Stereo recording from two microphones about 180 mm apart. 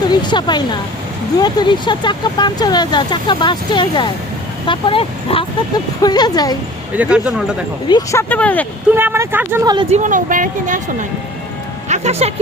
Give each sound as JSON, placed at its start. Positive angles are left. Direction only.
{"t": 0.1, "sound": "speech", "side_deg": 25}
{"t": 6.9, "sound": "speech", "side_deg": -5}
{"t": 7.9, "sound": "speech", "side_deg": 20}
{"t": 8.3, "sound": "speech", "side_deg": 10}
{"t": 9.0, "sound": "speech", "side_deg": -10}
{"t": 9.9, "sound": "speech", "side_deg": -45}
{"t": 11.9, "sound": "speech", "side_deg": -40}